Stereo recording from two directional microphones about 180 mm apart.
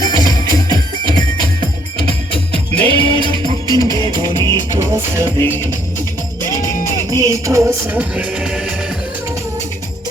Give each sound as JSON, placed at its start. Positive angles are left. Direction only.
{"t": 0.2, "sound": "music", "side_deg": -25}
{"t": 2.5, "sound": "music", "side_deg": -30}
{"t": 5.4, "sound": "music", "side_deg": 10}
{"t": 7.1, "sound": "music", "side_deg": -20}